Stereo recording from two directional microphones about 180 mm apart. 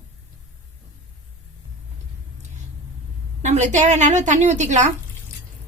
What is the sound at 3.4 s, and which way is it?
Speech, 40° right (ahead or behind).